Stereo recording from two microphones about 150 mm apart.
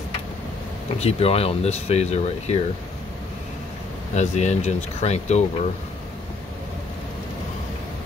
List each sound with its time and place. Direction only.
0.9 s speech: 40° left (ahead or behind)
4.1 s speech: 50° left (ahead or behind)